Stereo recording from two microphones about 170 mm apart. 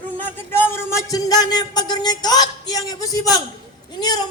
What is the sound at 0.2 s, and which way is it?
A man's voice, 10° left (ahead or behind).